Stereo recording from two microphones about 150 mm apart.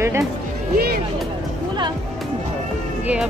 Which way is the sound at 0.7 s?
90° right.